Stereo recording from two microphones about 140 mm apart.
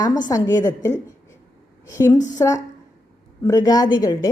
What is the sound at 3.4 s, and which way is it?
Speech, 25° left (ahead or behind).